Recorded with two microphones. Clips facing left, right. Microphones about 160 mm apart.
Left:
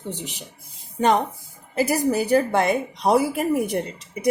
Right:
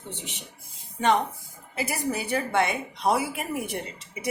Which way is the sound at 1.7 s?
40° left (ahead or behind).